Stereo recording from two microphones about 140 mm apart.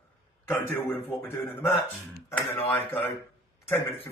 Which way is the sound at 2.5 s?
15° left (ahead or behind).